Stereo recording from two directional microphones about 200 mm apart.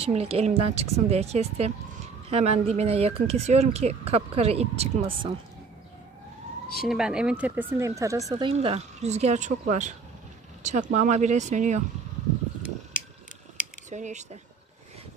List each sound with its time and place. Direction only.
0.0 s speech: 30° right (ahead or behind)
6.8 s speech: centre (ahead or behind); by 11.8 s 35° right (ahead or behind)
13.8 s speech: 35° right (ahead or behind)